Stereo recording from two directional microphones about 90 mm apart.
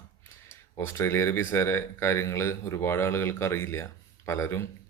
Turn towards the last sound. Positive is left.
turn(degrees=30)  # may be behind; listen again after turning